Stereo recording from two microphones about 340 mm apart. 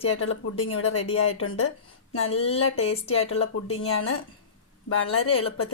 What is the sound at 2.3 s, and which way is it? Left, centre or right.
Speech, centre.